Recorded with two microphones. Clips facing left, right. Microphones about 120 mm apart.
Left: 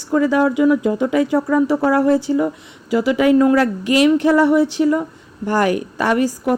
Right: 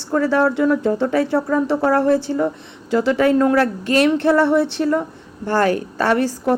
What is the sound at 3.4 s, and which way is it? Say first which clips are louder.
Speech: left 2 dB; 45° right (ahead or behind).